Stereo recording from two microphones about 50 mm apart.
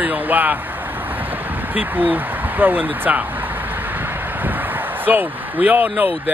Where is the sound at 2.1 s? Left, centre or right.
Right.